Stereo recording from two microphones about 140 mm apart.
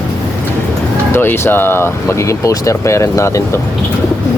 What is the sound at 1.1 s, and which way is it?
Speech, 15° left (ahead or behind).